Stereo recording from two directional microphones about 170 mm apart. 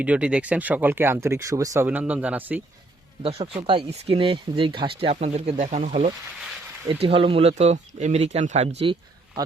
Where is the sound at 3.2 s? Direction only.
35° right (ahead or behind).